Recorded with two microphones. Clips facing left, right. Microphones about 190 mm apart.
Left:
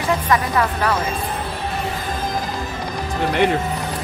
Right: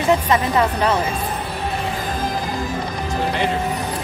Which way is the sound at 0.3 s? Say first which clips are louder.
Right 1 dB; 20° right (ahead or behind).